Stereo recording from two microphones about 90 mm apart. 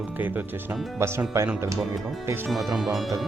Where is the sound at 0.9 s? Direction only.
30° right (ahead or behind).